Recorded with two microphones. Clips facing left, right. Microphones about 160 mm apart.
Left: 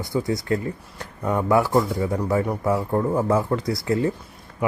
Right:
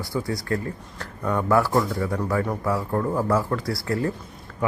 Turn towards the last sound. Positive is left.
turn(degrees=20)  # may be behind; listen again after turning